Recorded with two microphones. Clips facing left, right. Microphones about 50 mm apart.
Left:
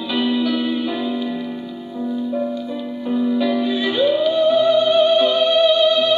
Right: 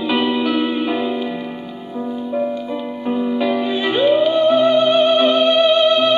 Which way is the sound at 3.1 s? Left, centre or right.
Right.